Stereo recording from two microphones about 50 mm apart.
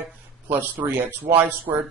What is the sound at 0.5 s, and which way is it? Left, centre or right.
A man's voice, right.